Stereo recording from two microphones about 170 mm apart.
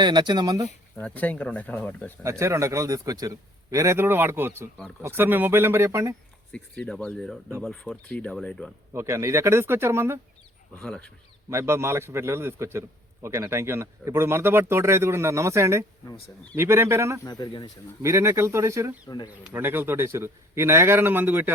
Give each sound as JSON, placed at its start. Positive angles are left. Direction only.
{"t": 0.0, "sound": "speech", "side_deg": -25}
{"t": 0.9, "sound": "speech", "side_deg": 10}
{"t": 2.4, "sound": "a man's voice", "side_deg": -15}
{"t": 6.5, "sound": "speech", "side_deg": 5}
{"t": 8.9, "sound": "a man's voice", "side_deg": -15}
{"t": 10.8, "sound": "speech", "side_deg": 5}
{"t": 11.5, "sound": "a man's voice", "side_deg": -15}
{"t": 16.1, "sound": "speech", "side_deg": 5}
{"t": 16.6, "sound": "a man's voice", "side_deg": -15}
{"t": 17.2, "sound": "speech", "side_deg": 25}
{"t": 18.0, "sound": "a man's voice", "side_deg": -15}
{"t": 19.0, "sound": "speech", "side_deg": 25}
{"t": 19.5, "sound": "a man's voice", "side_deg": -10}